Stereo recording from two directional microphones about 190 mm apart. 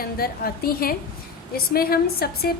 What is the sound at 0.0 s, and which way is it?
A woman's voice, 50° left (ahead or behind).